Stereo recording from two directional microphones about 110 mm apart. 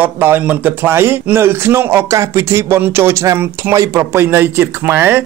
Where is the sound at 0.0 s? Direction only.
15° right (ahead or behind).